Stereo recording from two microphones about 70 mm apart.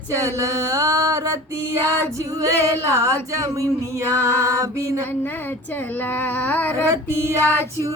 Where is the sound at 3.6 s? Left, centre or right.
Right.